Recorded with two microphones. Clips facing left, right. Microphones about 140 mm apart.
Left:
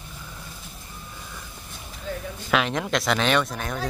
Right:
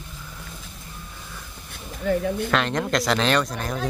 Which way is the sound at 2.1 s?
65° right (ahead or behind).